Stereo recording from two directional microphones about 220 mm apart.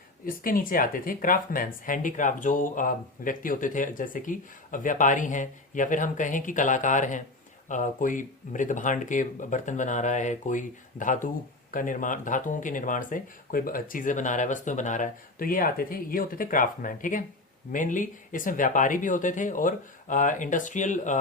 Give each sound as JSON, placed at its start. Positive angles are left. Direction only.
{"t": 0.3, "sound": "speech", "side_deg": 40}